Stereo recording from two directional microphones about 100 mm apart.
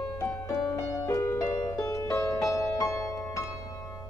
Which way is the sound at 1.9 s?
30° left (ahead or behind).